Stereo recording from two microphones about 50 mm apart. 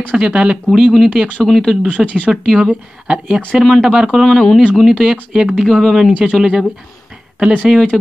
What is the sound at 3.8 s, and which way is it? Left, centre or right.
Speech, centre.